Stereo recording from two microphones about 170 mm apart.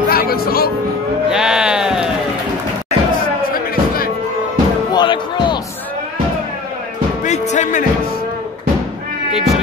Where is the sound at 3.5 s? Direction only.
60° left (ahead or behind).